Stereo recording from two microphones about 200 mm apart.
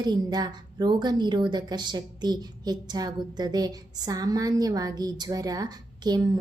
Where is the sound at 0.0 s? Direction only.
20° right (ahead or behind).